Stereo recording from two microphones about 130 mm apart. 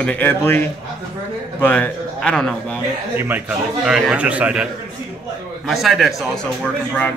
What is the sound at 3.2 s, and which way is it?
A man's voice, 15° right (ahead or behind).